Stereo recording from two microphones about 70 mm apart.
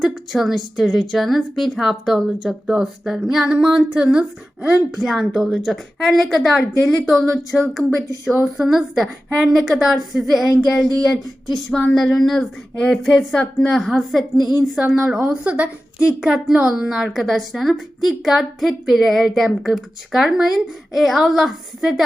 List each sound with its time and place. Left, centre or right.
0.0 s a woman's voice: centre
4.9 s a woman's voice: centre
11.9 s a woman's voice: centre
14.3 s a woman's voice: left
14.6 s speech: centre
15.2 s a woman's voice: centre